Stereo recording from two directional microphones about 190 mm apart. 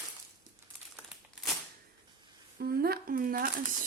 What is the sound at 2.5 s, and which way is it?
A woman's voice, 55° right (ahead or behind).